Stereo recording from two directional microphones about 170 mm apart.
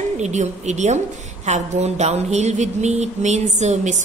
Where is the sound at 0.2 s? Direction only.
45° right (ahead or behind).